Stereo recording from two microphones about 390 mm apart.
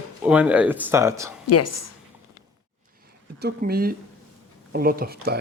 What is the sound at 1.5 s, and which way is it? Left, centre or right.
Speech, left.